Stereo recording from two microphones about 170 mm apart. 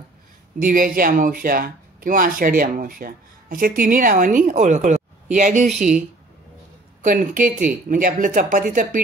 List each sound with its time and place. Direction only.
0.6 s speech: 55° right (ahead or behind)